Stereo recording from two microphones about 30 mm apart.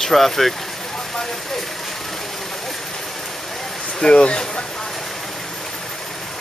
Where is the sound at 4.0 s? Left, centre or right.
Left.